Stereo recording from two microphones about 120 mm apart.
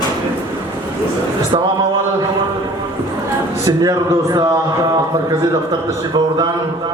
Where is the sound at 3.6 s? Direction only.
30° right (ahead or behind).